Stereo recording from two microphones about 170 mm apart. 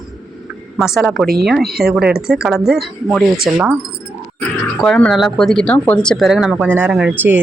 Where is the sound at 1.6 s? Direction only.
65° right (ahead or behind).